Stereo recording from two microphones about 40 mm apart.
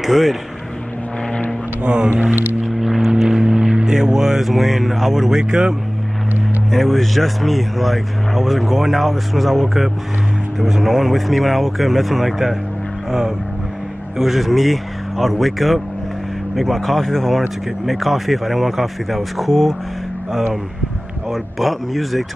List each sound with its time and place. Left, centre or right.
0.0 s speech: centre
1.8 s speech: right
2.8 s speech: centre
6.7 s speech: centre
14.1 s speech: centre
21.3 s speech: centre